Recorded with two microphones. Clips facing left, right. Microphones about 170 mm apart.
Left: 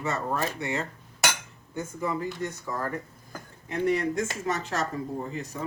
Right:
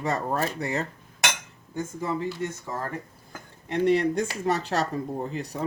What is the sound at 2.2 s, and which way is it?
A man's voice, 25° right (ahead or behind).